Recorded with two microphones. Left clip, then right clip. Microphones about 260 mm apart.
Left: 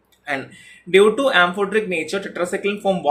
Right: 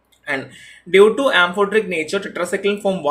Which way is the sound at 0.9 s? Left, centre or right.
Centre.